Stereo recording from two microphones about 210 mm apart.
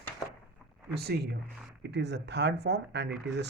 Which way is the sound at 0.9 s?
50° right (ahead or behind).